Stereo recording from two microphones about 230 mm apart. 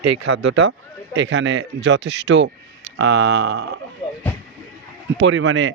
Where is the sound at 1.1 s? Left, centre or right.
Right.